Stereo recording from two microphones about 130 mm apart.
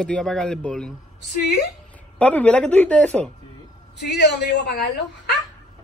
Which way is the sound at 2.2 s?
10° left (ahead or behind).